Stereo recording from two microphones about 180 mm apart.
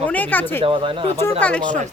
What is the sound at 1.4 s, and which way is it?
Speech, 5° left (ahead or behind).